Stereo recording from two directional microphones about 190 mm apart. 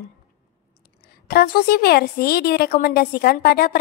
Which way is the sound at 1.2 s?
55° left (ahead or behind).